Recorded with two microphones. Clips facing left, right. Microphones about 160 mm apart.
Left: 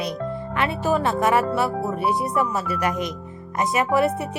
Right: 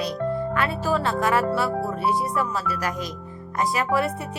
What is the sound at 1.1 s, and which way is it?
Speech, 20° left (ahead or behind).